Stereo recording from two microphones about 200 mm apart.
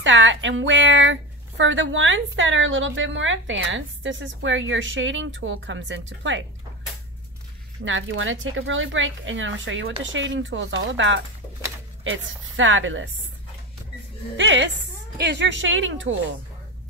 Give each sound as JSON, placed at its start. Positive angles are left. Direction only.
{"t": 0.0, "sound": "a woman's voice", "side_deg": -70}
{"t": 7.8, "sound": "a woman's voice", "side_deg": -75}
{"t": 14.3, "sound": "a woman's voice", "side_deg": -65}